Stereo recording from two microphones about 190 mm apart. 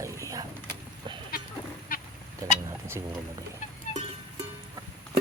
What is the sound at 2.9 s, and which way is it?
Speech, 15° right (ahead or behind).